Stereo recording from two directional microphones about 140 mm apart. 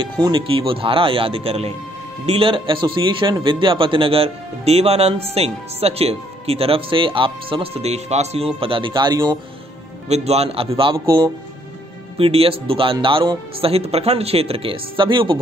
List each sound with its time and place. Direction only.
0.0 s a man's voice: 35° right (ahead or behind)
8.5 s a man's voice: 40° right (ahead or behind)
10.0 s speech: 50° right (ahead or behind)
11.1 s a man's voice: 25° right (ahead or behind)
12.2 s a man's voice: 45° right (ahead or behind)
13.7 s speech: 45° right (ahead or behind)